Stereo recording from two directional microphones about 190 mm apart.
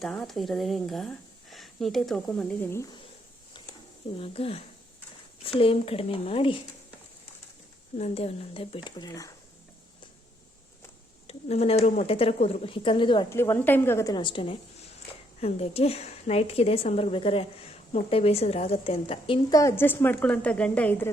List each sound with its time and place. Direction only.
0.0 s speech: 5° left (ahead or behind)
4.2 s a woman's voice: 30° left (ahead or behind)
7.9 s speech: 35° left (ahead or behind); by 9.3 s 20° left (ahead or behind)
11.3 s a woman's voice: 35° left (ahead or behind)
13.3 s a woman's voice: 10° left (ahead or behind); by 19.4 s 30° left (ahead or behind)
19.5 s a woman's voice: 15° left (ahead or behind)